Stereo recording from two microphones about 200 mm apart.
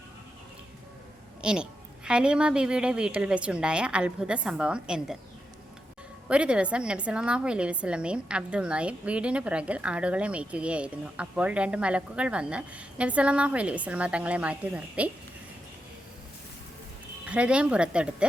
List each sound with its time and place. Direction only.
1.4 s a woman's voice: 5° right (ahead or behind)
6.2 s a woman's voice: 5° right (ahead or behind)
17.2 s a woman's voice: 5° right (ahead or behind)